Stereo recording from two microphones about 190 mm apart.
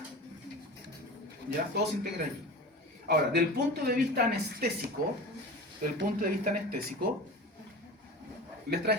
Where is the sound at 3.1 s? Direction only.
55° right (ahead or behind).